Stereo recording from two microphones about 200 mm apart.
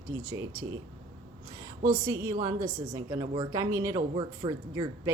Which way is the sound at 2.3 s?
20° right (ahead or behind).